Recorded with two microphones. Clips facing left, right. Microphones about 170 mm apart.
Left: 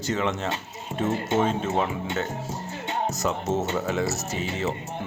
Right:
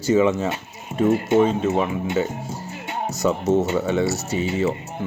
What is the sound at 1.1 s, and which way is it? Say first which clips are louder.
Speech: right 7 dB; 25° left (ahead or behind).